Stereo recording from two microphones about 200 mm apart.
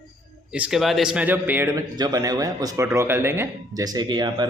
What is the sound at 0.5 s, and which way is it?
Speech, 5° right (ahead or behind).